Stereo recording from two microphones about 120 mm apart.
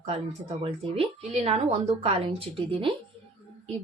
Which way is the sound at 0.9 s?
55° right (ahead or behind).